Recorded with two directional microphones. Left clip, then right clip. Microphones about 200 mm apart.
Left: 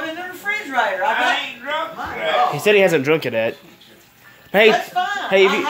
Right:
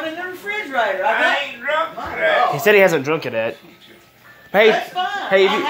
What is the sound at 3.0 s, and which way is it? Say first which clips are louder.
Speech: left 2 dB; 35° left (ahead or behind).